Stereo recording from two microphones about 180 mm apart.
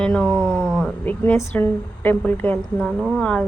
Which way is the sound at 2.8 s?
Centre (ahead or behind).